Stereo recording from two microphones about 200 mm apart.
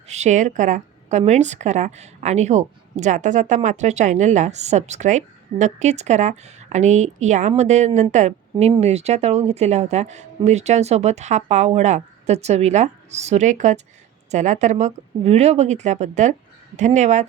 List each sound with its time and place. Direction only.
0.1 s a woman's voice: 35° right (ahead or behind)